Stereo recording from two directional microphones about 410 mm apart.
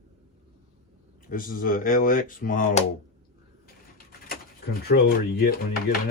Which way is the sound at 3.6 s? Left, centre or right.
Left.